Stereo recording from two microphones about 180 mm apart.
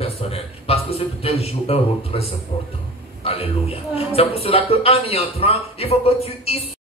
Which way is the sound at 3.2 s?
35° left (ahead or behind).